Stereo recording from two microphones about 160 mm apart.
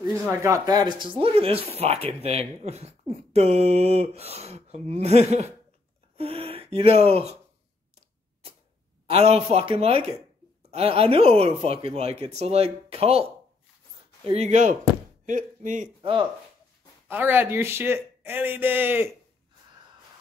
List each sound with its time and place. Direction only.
0.4 s speech: 20° right (ahead or behind); by 7.3 s 40° right (ahead or behind)
9.1 s speech: 40° right (ahead or behind)
16.0 s speech: 35° right (ahead or behind)
17.1 s a man's voice: 15° right (ahead or behind)